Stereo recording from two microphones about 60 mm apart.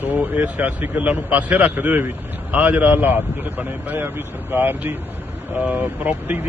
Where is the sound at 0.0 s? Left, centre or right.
Right.